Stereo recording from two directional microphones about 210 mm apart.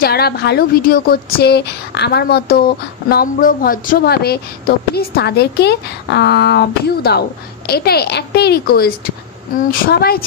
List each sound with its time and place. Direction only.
0.0 s speech: 50° left (ahead or behind)